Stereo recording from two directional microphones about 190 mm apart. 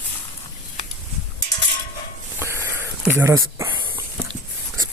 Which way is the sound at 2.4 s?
15° right (ahead or behind).